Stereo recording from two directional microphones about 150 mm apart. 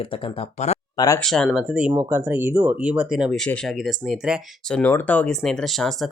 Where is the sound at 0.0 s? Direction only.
35° left (ahead or behind).